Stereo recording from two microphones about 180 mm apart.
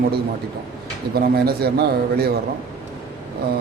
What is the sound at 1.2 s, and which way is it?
A man's voice, 60° right (ahead or behind).